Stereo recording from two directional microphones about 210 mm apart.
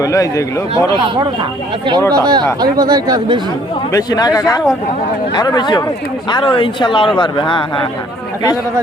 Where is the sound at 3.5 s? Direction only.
20° left (ahead or behind).